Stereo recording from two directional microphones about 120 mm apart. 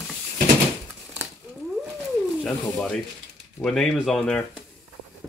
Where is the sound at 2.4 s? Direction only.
5° left (ahead or behind).